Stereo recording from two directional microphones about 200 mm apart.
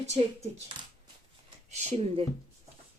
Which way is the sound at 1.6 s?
35° right (ahead or behind).